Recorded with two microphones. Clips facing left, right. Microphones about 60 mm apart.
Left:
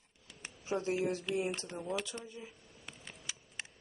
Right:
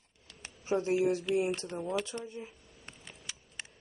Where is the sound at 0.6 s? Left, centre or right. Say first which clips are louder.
Right 5 dB; right.